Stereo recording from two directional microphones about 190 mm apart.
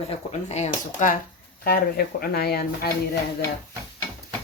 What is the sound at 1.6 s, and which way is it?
Speech, 55° left (ahead or behind).